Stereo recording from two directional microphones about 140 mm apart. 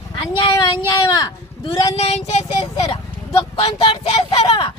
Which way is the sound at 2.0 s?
50° left (ahead or behind).